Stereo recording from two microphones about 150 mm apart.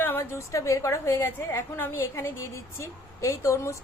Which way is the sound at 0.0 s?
15° left (ahead or behind).